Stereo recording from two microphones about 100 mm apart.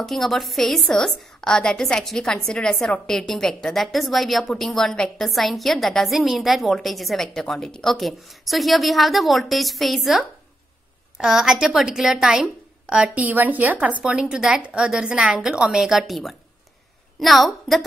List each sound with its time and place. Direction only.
0.0 s a woman's voice: centre (ahead or behind)